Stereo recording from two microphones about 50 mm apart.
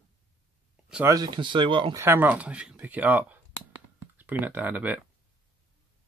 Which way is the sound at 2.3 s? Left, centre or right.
Right.